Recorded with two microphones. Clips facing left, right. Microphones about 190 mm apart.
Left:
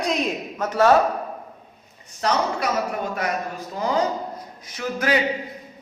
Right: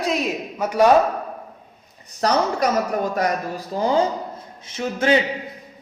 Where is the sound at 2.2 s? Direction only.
40° right (ahead or behind).